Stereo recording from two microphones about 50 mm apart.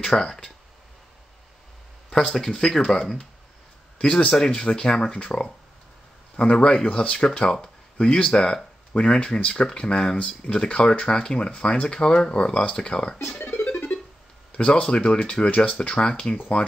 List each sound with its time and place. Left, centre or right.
0.0 s speech: centre
2.0 s speech: centre
10.5 s speech: centre
13.4 s music: left
14.5 s speech: centre